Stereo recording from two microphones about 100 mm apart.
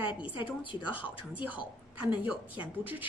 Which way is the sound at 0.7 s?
15° right (ahead or behind).